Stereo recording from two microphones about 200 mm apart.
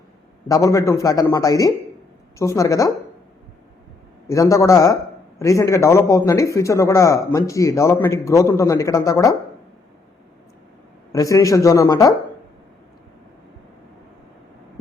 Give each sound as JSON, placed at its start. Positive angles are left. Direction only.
{"t": 0.4, "sound": "speech", "side_deg": 15}
{"t": 4.3, "sound": "speech", "side_deg": 15}
{"t": 11.1, "sound": "speech", "side_deg": 15}